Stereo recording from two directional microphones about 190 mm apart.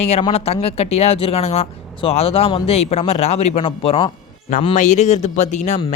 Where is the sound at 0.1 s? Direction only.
30° left (ahead or behind).